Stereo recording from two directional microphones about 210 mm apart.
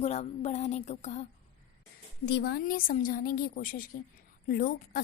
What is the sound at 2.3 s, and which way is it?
A woman's voice, 50° left (ahead or behind).